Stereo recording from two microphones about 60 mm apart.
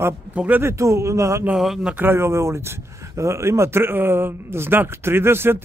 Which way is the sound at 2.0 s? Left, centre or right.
Right.